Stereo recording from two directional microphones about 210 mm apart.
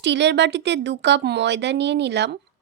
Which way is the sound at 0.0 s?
55° right (ahead or behind).